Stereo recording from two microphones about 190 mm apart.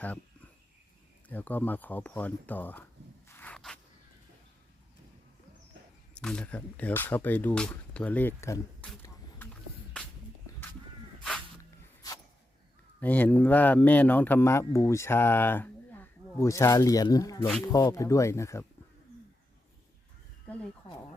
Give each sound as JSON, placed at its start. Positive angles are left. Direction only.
{"t": 1.3, "sound": "speech", "side_deg": 10}
{"t": 3.2, "sound": "a sound", "side_deg": 10}
{"t": 6.1, "sound": "speech", "side_deg": 5}
{"t": 10.0, "sound": "music", "side_deg": 5}
{"t": 11.2, "sound": "dog", "side_deg": 5}
{"t": 13.0, "sound": "speech", "side_deg": 10}